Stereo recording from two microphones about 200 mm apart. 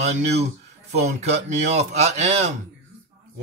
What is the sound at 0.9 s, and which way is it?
Speech, 35° right (ahead or behind).